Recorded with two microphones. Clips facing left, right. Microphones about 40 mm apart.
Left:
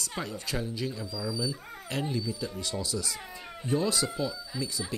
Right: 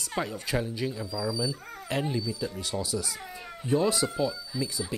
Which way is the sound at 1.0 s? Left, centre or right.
Right.